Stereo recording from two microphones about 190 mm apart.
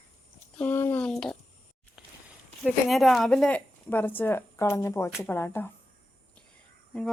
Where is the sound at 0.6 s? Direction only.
10° left (ahead or behind).